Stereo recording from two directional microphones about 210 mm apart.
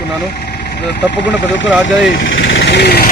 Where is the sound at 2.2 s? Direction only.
60° left (ahead or behind).